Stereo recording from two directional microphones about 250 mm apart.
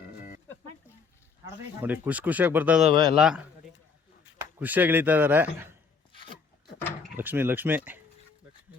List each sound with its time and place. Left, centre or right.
1.8 s a man's voice: centre
4.5 s a man's voice: centre
7.2 s a man's voice: centre